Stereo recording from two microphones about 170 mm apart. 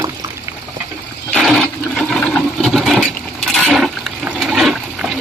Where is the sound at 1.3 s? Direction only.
Centre (ahead or behind).